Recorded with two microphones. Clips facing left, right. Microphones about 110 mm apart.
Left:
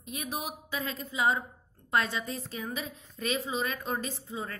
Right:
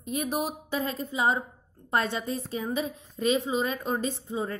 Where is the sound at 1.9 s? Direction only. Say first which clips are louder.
Right 2 dB; 30° right (ahead or behind).